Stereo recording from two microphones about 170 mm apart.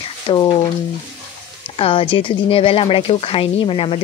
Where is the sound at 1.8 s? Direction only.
30° left (ahead or behind).